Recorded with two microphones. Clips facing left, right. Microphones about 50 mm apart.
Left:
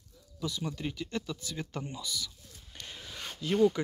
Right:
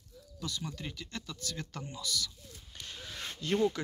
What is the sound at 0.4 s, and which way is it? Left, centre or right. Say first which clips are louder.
Speech: left 4 dB; centre.